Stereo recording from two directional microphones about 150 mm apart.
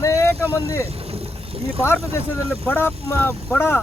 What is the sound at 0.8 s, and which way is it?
Vehicle, 40° right (ahead or behind).